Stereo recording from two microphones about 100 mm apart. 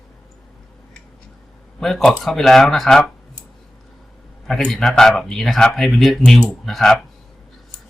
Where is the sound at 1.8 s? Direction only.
5° left (ahead or behind).